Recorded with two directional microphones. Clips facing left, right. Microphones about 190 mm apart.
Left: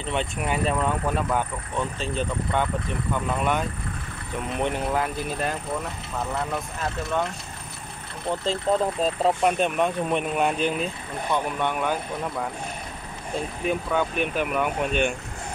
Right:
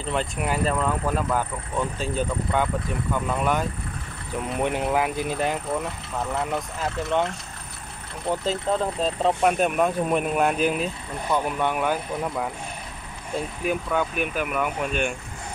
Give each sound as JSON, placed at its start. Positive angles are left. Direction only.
{"t": 0.0, "sound": "speech", "side_deg": 0}
{"t": 6.8, "sound": "speech", "side_deg": -20}
{"t": 8.3, "sound": "speech", "side_deg": -10}
{"t": 8.7, "sound": "speech", "side_deg": 0}
{"t": 13.7, "sound": "speech", "side_deg": -5}